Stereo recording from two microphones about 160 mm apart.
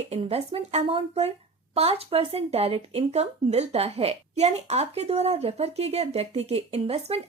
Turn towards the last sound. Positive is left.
turn(degrees=-40)  # may be behind; listen again after turning